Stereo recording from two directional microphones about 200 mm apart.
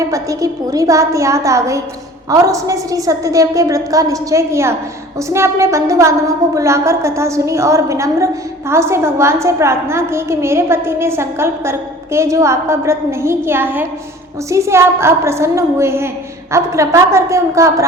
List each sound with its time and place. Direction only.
0.0 s a woman's voice: 15° right (ahead or behind)